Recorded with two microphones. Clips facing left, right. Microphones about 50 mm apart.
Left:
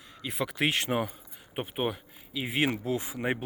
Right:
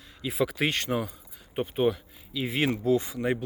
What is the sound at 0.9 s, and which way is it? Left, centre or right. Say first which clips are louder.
Speech: even; left.